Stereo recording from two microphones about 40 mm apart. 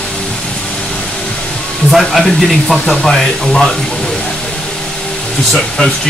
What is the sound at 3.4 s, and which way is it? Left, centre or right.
Speech, centre.